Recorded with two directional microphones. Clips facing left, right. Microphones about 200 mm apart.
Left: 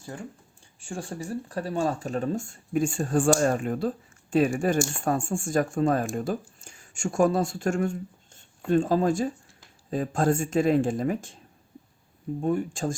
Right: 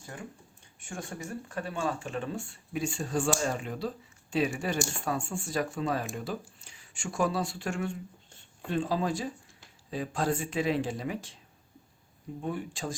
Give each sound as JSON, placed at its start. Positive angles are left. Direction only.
{"t": 0.8, "sound": "speech", "side_deg": 30}
{"t": 12.4, "sound": "speech", "side_deg": 45}